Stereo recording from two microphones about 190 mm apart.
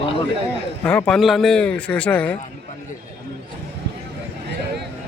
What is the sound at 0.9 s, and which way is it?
Speech, 5° left (ahead or behind).